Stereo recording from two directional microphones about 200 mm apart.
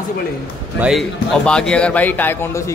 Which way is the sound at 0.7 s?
Centre (ahead or behind).